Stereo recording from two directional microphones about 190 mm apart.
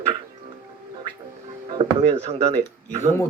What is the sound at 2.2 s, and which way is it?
Speech, 35° right (ahead or behind).